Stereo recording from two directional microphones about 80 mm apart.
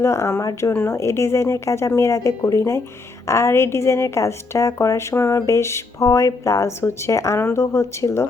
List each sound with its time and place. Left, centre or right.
0.0 s a woman's voice: left